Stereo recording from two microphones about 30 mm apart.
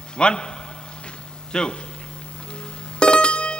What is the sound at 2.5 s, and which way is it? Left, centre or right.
Music, left.